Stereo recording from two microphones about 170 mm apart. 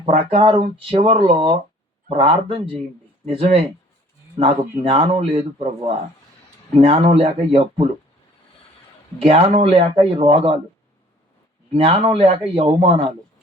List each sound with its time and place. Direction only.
0.0 s speech: 35° right (ahead or behind)
9.2 s speech: 35° right (ahead or behind)
11.7 s speech: 30° right (ahead or behind)